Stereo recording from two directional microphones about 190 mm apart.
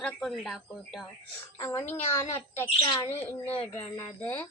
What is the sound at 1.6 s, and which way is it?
Speech, 15° left (ahead or behind).